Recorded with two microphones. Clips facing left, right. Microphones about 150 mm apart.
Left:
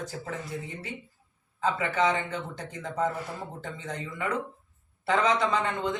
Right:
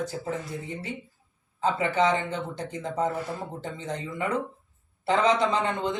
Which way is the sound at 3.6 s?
25° right (ahead or behind).